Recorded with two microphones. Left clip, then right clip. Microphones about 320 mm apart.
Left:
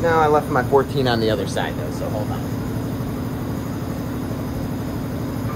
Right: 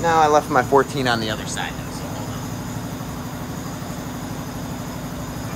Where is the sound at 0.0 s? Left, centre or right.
Right.